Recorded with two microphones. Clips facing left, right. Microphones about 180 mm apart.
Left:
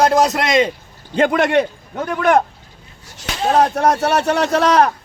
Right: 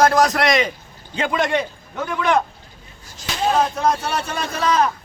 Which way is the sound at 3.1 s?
70° left (ahead or behind).